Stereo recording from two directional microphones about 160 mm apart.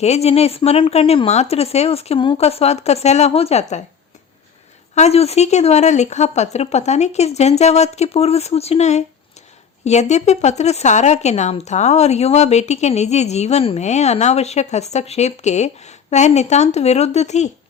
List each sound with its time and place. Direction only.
0.0 s a woman's voice: 40° left (ahead or behind)
4.9 s speech: 40° left (ahead or behind)